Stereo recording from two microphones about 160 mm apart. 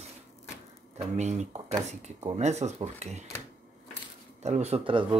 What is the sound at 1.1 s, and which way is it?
Speech, 45° right (ahead or behind).